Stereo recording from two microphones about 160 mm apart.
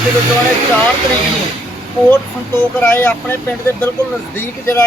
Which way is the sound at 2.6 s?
10° left (ahead or behind).